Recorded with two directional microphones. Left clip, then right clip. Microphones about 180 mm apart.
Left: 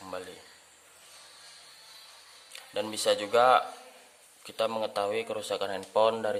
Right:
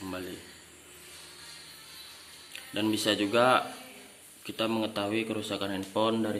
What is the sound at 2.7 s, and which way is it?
Speech, 65° left (ahead or behind).